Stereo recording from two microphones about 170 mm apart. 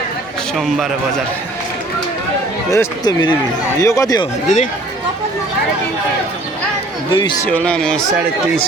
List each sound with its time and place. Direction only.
0.5 s a man's voice: centre (ahead or behind)
2.6 s speech: 20° left (ahead or behind)
4.4 s speech: 45° left (ahead or behind)
7.1 s speech: 25° left (ahead or behind)
7.4 s a man's voice: 10° left (ahead or behind)